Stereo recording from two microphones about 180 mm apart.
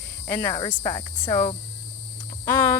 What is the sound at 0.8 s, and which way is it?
Cricket, 25° left (ahead or behind).